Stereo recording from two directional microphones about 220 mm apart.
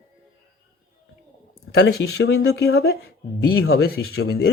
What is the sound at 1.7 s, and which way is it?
Speech, 50° left (ahead or behind).